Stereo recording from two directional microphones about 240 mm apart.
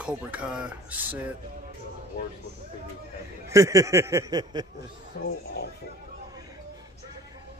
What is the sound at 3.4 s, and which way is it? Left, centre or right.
A man's voice, centre.